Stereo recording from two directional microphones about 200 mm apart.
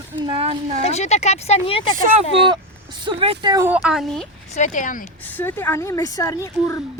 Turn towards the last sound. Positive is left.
turn(degrees=15)  # may be behind; listen again after turning